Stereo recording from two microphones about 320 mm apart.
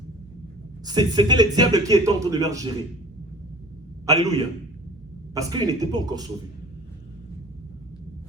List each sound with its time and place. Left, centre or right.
0.9 s speech: centre
4.0 s a man's voice: centre
5.3 s speech: centre